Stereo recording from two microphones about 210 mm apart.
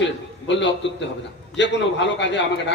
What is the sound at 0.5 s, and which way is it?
A man's voice, 55° left (ahead or behind).